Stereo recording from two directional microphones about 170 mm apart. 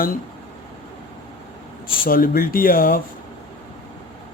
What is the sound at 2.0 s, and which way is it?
Speech, 60° left (ahead or behind).